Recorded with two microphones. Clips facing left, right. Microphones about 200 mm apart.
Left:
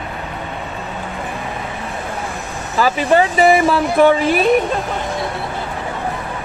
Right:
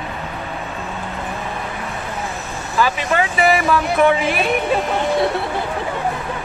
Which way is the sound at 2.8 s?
35° left (ahead or behind).